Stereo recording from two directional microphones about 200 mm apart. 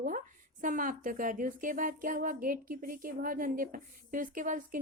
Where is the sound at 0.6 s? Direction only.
40° right (ahead or behind).